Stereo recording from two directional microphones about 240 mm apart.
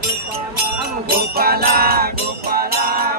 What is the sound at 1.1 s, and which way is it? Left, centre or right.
Music, right.